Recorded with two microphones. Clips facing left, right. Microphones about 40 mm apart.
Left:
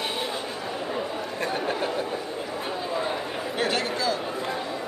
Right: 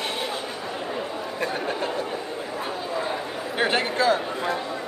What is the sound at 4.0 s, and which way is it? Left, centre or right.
Speech, right.